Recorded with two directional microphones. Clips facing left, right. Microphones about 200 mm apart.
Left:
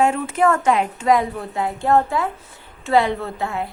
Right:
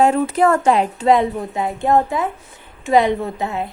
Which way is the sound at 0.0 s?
35° right (ahead or behind).